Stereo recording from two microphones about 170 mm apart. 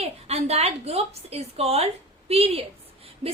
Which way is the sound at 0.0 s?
40° right (ahead or behind).